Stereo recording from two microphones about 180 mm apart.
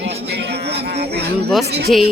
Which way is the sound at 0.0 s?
70° right (ahead or behind).